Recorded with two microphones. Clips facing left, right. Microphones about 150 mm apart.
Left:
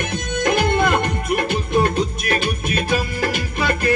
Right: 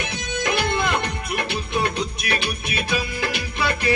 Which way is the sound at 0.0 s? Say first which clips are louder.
Left 5 dB; 50° left (ahead or behind).